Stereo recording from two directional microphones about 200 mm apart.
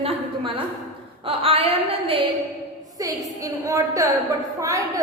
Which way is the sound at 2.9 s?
15° right (ahead or behind).